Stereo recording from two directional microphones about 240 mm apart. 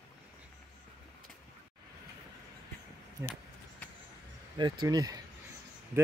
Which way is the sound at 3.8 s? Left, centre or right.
Centre.